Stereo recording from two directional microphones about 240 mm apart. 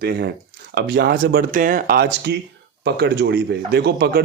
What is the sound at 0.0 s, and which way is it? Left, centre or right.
Speech, right.